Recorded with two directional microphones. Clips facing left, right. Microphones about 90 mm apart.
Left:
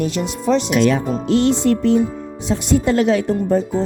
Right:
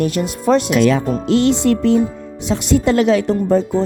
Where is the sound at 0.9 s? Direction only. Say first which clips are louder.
Right 1 dB; 90° right.